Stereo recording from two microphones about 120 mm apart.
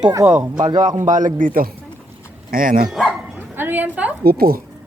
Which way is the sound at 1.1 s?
90° right.